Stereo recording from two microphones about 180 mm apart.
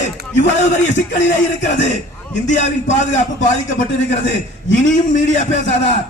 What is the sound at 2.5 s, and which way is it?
A man's voice, 40° left (ahead or behind).